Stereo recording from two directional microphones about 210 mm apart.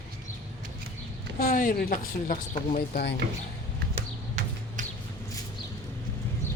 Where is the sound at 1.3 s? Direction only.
40° left (ahead or behind).